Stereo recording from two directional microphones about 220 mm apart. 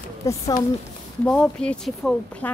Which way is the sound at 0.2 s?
15° left (ahead or behind).